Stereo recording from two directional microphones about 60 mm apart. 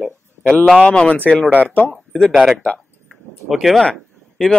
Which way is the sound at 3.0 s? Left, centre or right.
Centre.